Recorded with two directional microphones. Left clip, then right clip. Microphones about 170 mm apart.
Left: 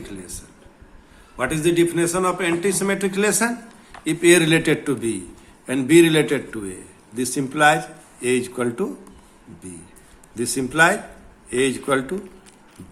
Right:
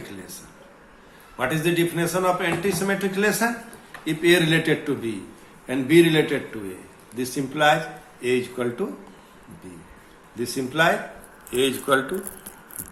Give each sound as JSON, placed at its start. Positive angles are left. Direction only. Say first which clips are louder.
{"t": 0.0, "sound": "a sound", "louder": "left 2 dB", "side_deg": 30}
{"t": 1.4, "sound": "speech", "louder": "left 3 dB", "side_deg": 35}
{"t": 10.3, "sound": "speech", "louder": "left 4 dB", "side_deg": 50}